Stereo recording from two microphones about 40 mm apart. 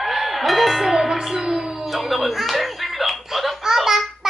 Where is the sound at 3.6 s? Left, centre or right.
Centre.